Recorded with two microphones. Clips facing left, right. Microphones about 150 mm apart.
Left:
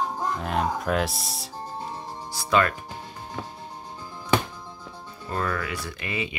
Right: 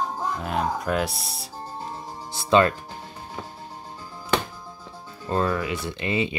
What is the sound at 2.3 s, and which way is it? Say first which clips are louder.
Speech: right 4 dB; 25° right (ahead or behind).